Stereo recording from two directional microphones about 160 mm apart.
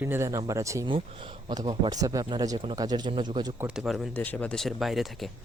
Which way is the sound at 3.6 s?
5° right (ahead or behind).